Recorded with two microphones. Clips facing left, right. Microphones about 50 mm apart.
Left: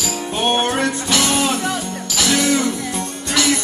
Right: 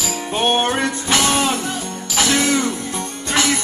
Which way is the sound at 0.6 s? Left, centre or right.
Right.